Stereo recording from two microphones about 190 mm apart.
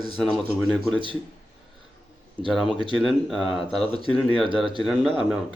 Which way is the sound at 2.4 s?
25° left (ahead or behind).